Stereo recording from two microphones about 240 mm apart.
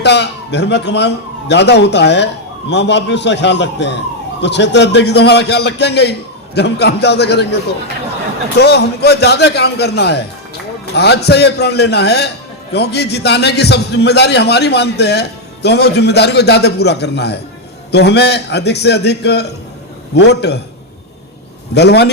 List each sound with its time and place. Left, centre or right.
0.0 s a man's voice: left
21.8 s a man's voice: left